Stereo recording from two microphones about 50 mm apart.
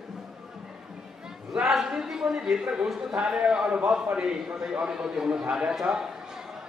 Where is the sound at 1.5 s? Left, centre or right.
Centre.